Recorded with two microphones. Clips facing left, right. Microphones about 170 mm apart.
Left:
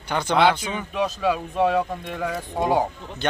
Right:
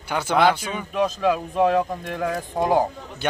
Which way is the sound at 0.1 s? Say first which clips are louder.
Even; 10° right (ahead or behind).